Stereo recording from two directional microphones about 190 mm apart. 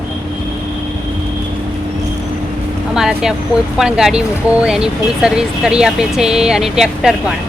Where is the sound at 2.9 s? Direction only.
5° right (ahead or behind).